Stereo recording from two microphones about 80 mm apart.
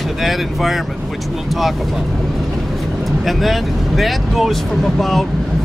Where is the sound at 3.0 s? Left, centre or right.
Centre.